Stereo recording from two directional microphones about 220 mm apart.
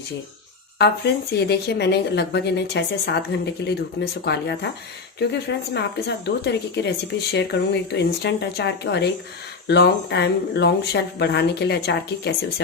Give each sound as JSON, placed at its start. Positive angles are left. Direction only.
{"t": 0.8, "sound": "speech", "side_deg": 50}